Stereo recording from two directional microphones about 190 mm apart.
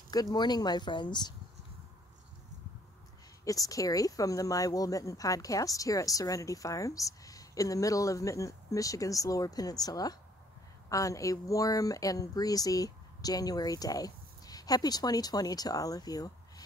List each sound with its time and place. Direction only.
0.1 s speech: 20° left (ahead or behind)
3.4 s speech: 20° left (ahead or behind)